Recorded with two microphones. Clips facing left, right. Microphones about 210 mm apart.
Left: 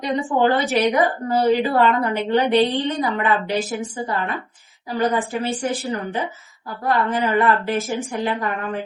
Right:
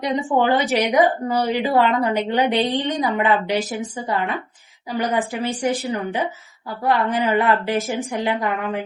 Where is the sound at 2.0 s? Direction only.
15° right (ahead or behind).